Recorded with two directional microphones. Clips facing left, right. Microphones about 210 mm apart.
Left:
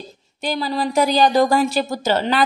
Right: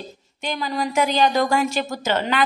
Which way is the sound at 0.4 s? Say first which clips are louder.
Left 3 dB; 35° left (ahead or behind).